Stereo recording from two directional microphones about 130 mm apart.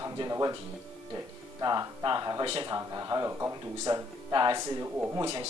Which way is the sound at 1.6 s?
30° right (ahead or behind).